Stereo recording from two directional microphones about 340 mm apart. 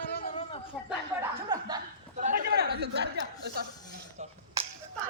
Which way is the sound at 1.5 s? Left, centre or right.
Centre.